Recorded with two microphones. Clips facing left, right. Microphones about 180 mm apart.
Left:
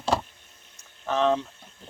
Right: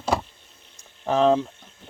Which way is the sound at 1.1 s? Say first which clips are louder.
Right 4 dB; 30° right (ahead or behind).